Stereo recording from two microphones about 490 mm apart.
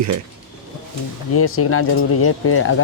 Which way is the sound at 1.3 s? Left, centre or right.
Left.